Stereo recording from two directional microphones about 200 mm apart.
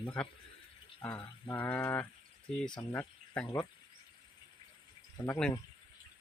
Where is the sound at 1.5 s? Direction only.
10° left (ahead or behind).